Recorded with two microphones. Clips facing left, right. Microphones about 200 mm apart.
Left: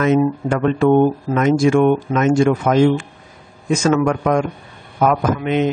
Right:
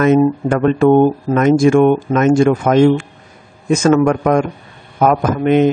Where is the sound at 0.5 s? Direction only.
50° right (ahead or behind).